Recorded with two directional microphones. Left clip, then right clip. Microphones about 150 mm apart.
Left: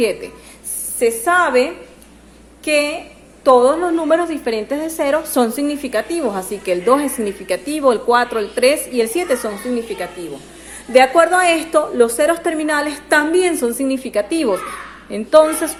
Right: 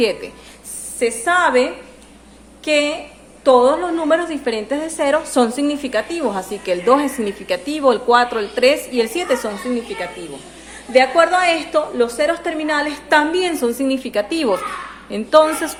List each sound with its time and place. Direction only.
0.0 s a woman's voice: 10° left (ahead or behind)
1.2 s a woman's voice: 20° left (ahead or behind)
10.9 s a woman's voice: 40° left (ahead or behind); by 15.5 s 10° left (ahead or behind)